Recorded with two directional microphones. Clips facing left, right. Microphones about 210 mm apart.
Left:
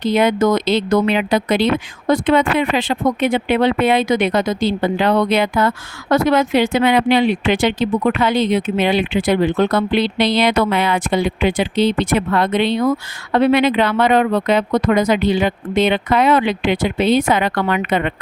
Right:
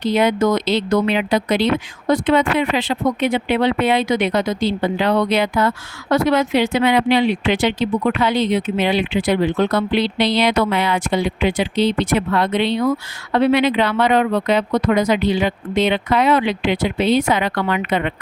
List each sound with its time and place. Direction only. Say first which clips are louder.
0.0 s speech: left 1 dB; 50° left (ahead or behind)